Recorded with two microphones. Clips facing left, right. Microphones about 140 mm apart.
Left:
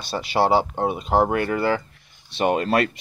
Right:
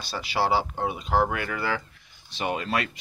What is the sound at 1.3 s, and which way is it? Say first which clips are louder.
Speech: left 8 dB; 40° left (ahead or behind).